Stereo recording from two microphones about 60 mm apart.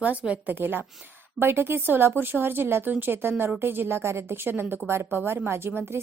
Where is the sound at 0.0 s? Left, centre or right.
Right.